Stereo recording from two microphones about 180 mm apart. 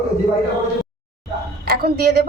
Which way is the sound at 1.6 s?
60° right (ahead or behind).